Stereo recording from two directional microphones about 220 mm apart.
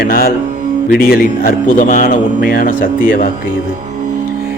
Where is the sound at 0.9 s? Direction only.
40° left (ahead or behind).